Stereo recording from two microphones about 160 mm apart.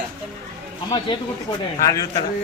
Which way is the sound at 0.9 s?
30° left (ahead or behind).